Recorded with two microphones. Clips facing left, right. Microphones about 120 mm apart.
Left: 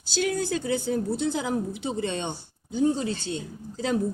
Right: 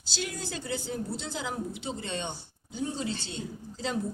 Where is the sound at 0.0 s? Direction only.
50° left (ahead or behind).